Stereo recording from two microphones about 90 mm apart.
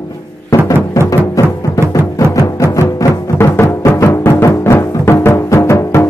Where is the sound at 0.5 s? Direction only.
35° left (ahead or behind).